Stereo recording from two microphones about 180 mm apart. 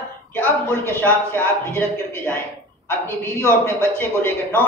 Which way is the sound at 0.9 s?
10° left (ahead or behind).